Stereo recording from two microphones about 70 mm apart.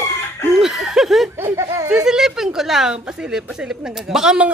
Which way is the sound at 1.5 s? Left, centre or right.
Right.